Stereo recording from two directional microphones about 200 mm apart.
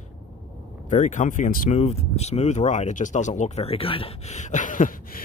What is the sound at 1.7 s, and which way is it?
Speech, 30° left (ahead or behind).